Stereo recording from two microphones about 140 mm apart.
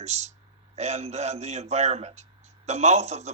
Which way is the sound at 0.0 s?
55° right (ahead or behind).